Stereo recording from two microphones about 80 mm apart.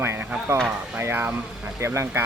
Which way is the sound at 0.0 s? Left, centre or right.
Right.